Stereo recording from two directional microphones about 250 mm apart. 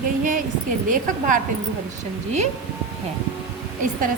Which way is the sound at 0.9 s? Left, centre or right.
Right.